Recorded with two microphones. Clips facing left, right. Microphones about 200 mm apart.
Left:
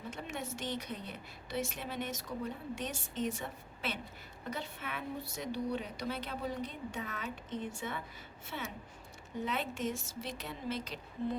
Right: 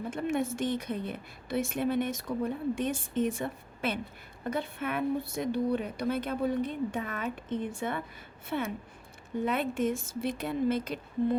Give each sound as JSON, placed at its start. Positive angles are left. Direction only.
{"t": 0.1, "sound": "a woman's voice", "side_deg": -55}